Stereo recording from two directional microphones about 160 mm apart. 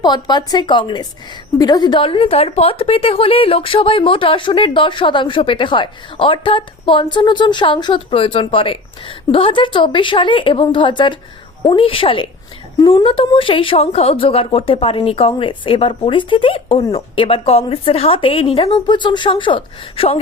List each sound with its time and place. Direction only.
0.0 s a woman's voice: 25° left (ahead or behind)